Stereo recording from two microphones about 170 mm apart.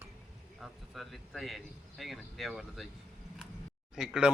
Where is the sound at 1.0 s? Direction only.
Centre (ahead or behind).